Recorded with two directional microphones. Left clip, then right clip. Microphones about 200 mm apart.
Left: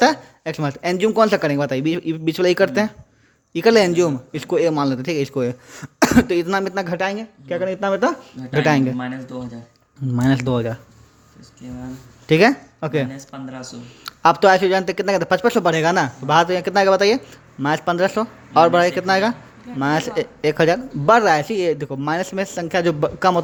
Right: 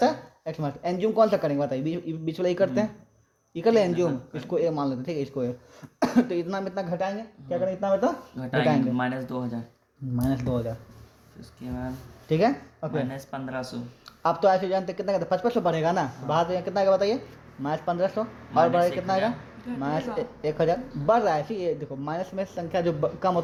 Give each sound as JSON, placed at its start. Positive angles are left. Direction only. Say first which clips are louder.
{"t": 0.0, "sound": "a man's voice", "louder": "left 8 dB", "side_deg": 45}
{"t": 9.0, "sound": "a man's voice", "louder": "even", "side_deg": -45}
{"t": 10.2, "sound": "a man's voice", "louder": "left 8 dB", "side_deg": 50}
{"t": 12.3, "sound": "speech", "louder": "left 9 dB", "side_deg": 45}
{"t": 13.1, "sound": "speech", "louder": "right 1 dB", "side_deg": -40}
{"t": 14.0, "sound": "a man's voice", "louder": "left 9 dB", "side_deg": 45}